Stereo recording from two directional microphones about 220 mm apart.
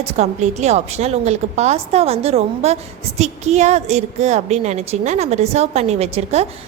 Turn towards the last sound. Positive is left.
turn(degrees=-30)  # may be behind; listen again after turning